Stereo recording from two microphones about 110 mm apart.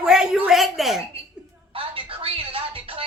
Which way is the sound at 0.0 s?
5° right (ahead or behind).